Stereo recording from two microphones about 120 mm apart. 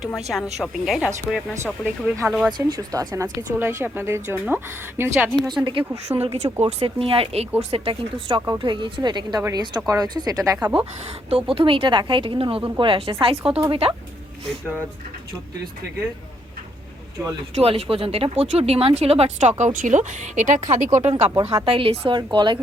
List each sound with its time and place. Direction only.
0.2 s speech: centre (ahead or behind)
2.5 s speech: 35° right (ahead or behind)
3.6 s a woman's voice: 20° right (ahead or behind)
5.6 s a woman's voice: 45° right (ahead or behind)
6.2 s speech: 60° right (ahead or behind)
8.4 s speech: 35° right (ahead or behind)
11.0 s a woman's voice: 55° right (ahead or behind)
17.5 s speech: 55° right (ahead or behind)
19.4 s speech: 80° right
21.0 s a woman's voice: 60° right (ahead or behind); by 22.5 s 40° right (ahead or behind)